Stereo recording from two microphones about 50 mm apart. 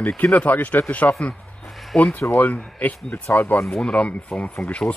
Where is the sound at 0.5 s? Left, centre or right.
Left.